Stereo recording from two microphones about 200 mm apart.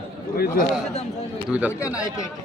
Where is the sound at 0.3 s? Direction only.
45° left (ahead or behind).